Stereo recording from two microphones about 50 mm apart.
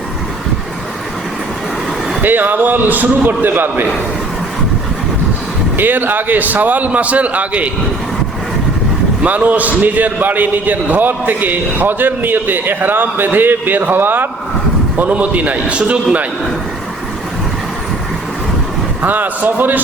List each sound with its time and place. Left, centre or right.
2.2 s a man's voice: right
5.7 s a man's voice: right
9.2 s a man's voice: right
14.9 s a man's voice: right
19.0 s a man's voice: right